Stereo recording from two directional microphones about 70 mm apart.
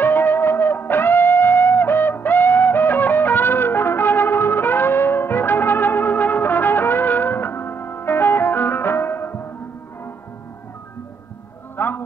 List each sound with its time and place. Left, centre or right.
0.0 s music: left
11.7 s music: left